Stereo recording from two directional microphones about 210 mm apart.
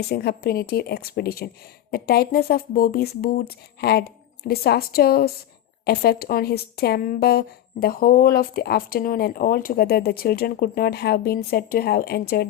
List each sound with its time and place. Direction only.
0.0 s speech: 50° left (ahead or behind)